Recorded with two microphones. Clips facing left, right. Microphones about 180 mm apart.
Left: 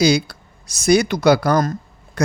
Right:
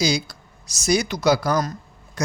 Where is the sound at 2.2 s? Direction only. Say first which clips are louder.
Left 6 dB; 60° left (ahead or behind).